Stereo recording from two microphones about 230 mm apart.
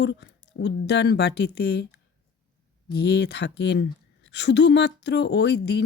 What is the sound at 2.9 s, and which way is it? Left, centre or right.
A woman's voice, left.